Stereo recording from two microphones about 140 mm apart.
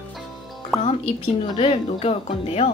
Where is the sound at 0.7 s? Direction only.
Centre (ahead or behind).